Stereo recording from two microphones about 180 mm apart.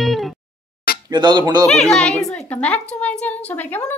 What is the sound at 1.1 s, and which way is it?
Music, 25° right (ahead or behind).